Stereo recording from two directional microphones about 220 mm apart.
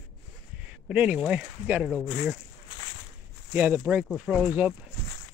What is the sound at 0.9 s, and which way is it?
Speech, 5° right (ahead or behind).